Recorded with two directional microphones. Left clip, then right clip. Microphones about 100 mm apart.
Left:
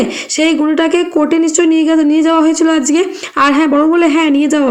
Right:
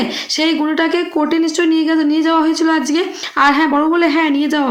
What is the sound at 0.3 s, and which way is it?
Speech, 25° left (ahead or behind).